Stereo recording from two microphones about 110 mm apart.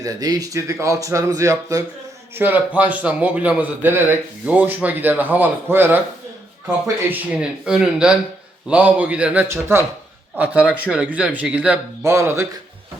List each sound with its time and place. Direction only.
0.0 s speech: 35° right (ahead or behind)
2.3 s a man's voice: 15° right (ahead or behind)
7.1 s a man's voice: 10° right (ahead or behind)
12.0 s music: 25° right (ahead or behind)